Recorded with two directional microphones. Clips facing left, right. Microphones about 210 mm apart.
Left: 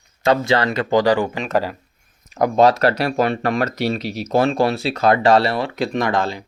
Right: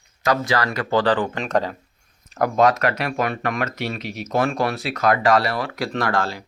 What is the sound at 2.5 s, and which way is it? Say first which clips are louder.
Speech: left 4 dB; 30° left (ahead or behind).